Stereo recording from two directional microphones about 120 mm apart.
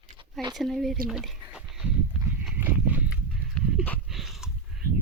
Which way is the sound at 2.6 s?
15° right (ahead or behind).